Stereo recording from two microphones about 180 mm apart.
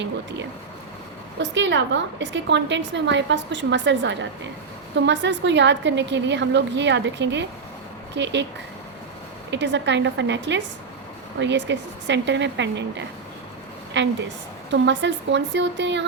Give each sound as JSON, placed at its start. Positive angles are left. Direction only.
{"t": 0.0, "sound": "a woman's voice", "side_deg": -80}
{"t": 9.5, "sound": "a woman's voice", "side_deg": -80}